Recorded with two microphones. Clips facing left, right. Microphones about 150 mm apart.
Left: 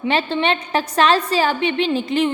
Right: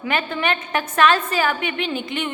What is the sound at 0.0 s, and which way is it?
A woman's voice, 30° left (ahead or behind).